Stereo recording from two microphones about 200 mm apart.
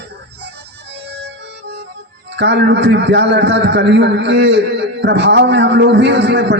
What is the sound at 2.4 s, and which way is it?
A man's voice, 60° right (ahead or behind).